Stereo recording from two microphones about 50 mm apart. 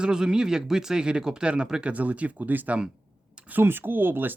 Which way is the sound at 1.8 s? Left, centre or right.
Right.